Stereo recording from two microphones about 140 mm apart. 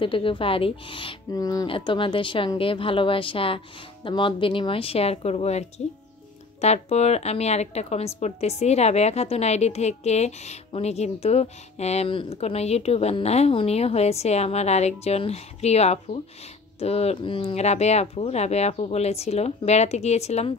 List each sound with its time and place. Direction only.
0.0 s speech: 40° left (ahead or behind)
1.3 s speech: 25° left (ahead or behind)
1.7 s speech: 35° left (ahead or behind)